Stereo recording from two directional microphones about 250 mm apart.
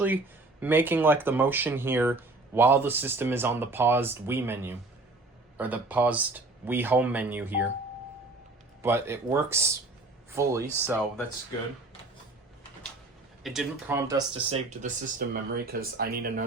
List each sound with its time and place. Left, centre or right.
0.6 s speech: centre
8.8 s speech: centre
13.4 s speech: centre
14.5 s speech: right